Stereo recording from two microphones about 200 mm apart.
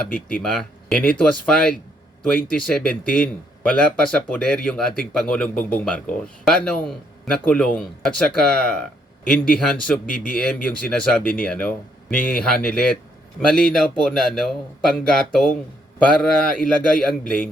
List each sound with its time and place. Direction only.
0.1 s speech: 45° left (ahead or behind)
0.4 s speech: centre (ahead or behind)